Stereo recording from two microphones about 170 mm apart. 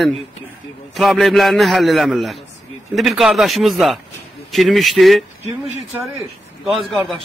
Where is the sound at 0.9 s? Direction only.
Centre (ahead or behind).